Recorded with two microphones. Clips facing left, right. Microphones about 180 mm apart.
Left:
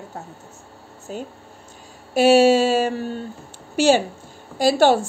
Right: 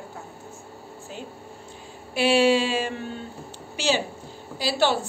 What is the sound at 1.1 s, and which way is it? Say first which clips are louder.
A woman's voice: left 8 dB; 45° left (ahead or behind).